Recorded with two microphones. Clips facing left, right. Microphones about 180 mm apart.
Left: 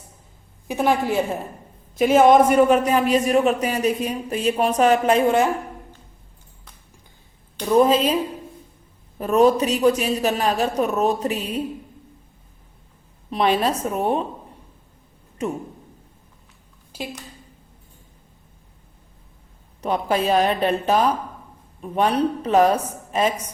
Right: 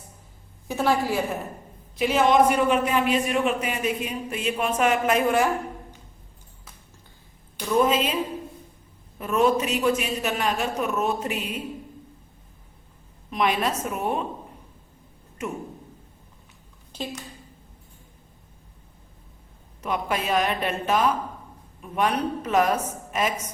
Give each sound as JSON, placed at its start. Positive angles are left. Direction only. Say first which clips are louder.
{"t": 0.7, "sound": "a woman's voice", "louder": "left 3 dB", "side_deg": 15}
{"t": 2.0, "sound": "a man's voice", "louder": "left 6 dB", "side_deg": 45}
{"t": 7.7, "sound": "a man's voice", "louder": "left 5 dB", "side_deg": 35}
{"t": 9.1, "sound": "a man's voice", "louder": "left 5 dB", "side_deg": 35}
{"t": 13.3, "sound": "a man's voice", "louder": "left 4 dB", "side_deg": 30}
{"t": 15.4, "sound": "speech", "louder": "left 6 dB", "side_deg": 35}
{"t": 16.9, "sound": "speech", "louder": "left 1 dB", "side_deg": 10}
{"t": 19.8, "sound": "a man's voice", "louder": "left 6 dB", "side_deg": 30}